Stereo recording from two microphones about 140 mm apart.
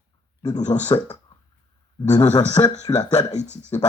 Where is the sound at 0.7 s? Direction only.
45° left (ahead or behind).